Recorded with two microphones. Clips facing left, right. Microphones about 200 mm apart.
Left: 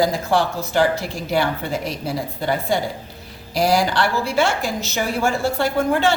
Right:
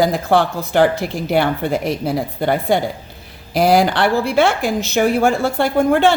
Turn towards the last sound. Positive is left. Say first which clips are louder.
# right 5 dB
turn(degrees=-55)  # may be behind; listen again after turning